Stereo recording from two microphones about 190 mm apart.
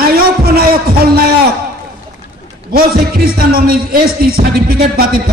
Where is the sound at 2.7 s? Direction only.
55° right (ahead or behind).